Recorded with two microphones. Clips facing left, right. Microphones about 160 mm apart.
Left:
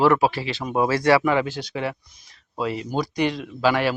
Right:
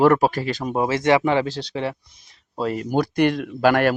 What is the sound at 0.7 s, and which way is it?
Speech, 25° right (ahead or behind).